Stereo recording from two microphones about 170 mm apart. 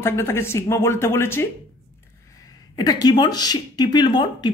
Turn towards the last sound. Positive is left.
turn(degrees=25)  # may be behind; listen again after turning